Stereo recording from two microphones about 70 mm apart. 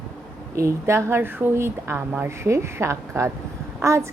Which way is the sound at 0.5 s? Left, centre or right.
Right.